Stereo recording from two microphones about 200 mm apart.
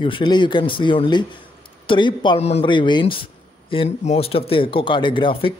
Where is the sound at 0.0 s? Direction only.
25° left (ahead or behind).